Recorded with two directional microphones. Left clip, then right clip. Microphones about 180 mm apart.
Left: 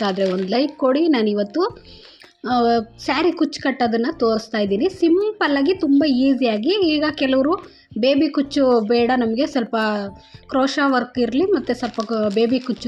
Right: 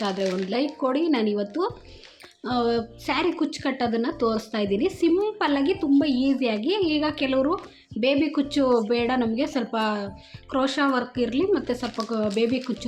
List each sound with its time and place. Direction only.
0.0 s a woman's voice: 30° left (ahead or behind)